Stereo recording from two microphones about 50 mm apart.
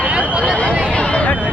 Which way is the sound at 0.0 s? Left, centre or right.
Right.